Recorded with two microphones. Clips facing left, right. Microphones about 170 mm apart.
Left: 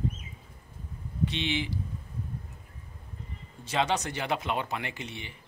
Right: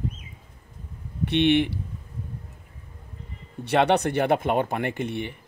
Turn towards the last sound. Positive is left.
turn(degrees=-55)  # may be behind; listen again after turning